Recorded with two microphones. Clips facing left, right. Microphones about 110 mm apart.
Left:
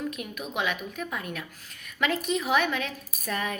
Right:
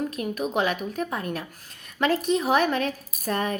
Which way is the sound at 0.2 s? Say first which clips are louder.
Right 7 dB; 40° right (ahead or behind).